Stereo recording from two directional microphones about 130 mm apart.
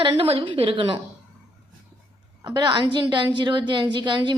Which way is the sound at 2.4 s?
30° right (ahead or behind).